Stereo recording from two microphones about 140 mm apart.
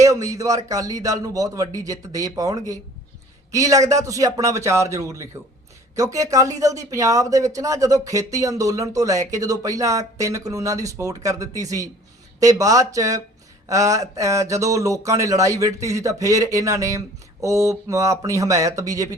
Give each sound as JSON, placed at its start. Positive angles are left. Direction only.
{"t": 0.0, "sound": "speech", "side_deg": -20}